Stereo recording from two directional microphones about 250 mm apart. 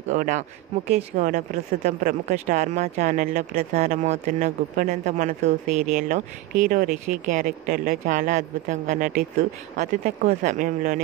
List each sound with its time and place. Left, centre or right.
0.1 s speech: right